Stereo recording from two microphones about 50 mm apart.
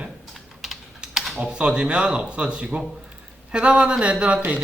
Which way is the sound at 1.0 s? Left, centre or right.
Centre.